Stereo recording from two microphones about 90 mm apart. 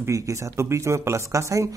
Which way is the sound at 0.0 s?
35° right (ahead or behind).